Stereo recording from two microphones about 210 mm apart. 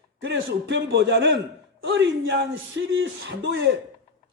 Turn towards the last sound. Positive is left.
turn(degrees=-60)  # may be behind; listen again after turning